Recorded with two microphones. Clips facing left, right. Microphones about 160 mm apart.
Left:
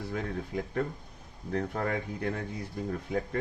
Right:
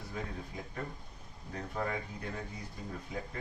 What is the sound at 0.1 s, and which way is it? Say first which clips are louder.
Speech: left 6 dB; 60° left (ahead or behind).